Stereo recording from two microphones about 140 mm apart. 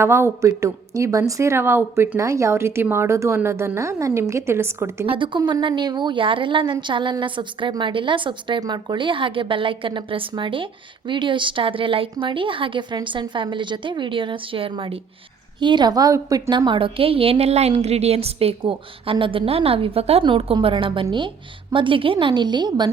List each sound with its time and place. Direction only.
0.0 s a woman's voice: 20° right (ahead or behind)
5.0 s a woman's voice: 35° right (ahead or behind)
18.6 s a woman's voice: 35° right (ahead or behind)